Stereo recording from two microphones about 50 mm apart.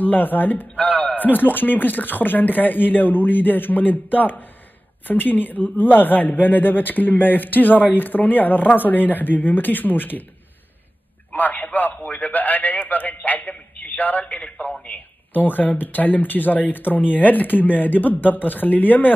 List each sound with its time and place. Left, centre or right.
0.0 s speech: left
0.7 s a sound: left
1.3 s speech: left
11.3 s a man's voice: left
14.2 s a man's voice: left
15.3 s speech: left